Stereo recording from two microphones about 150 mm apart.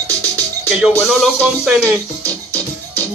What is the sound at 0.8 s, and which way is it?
Speech, centre (ahead or behind).